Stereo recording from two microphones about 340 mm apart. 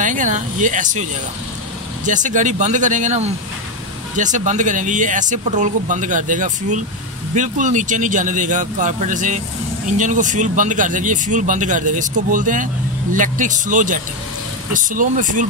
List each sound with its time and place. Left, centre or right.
0.0 s speech: right
2.0 s speech: right